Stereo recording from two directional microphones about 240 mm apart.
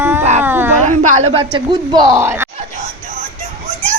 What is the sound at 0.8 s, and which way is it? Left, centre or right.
A woman's voice, right.